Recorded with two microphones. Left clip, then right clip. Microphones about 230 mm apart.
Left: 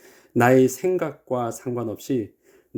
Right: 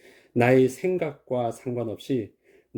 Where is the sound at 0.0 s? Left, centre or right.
Left.